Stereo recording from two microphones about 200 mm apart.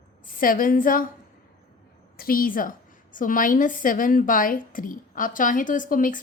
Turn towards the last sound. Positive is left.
turn(degrees=40)  # may be behind; listen again after turning